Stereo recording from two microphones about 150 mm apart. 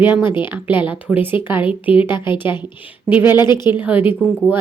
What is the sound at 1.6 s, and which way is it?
A woman's voice, 35° left (ahead or behind).